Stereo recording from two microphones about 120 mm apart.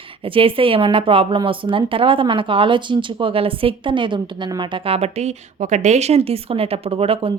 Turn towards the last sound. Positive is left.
turn(degrees=-50)  # may be behind; listen again after turning